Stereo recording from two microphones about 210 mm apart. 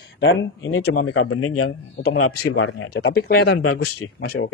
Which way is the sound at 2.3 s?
55° left (ahead or behind).